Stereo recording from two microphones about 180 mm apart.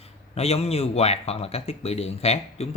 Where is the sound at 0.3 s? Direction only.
35° left (ahead or behind).